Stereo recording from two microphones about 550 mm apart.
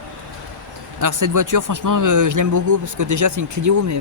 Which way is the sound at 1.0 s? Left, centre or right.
Right.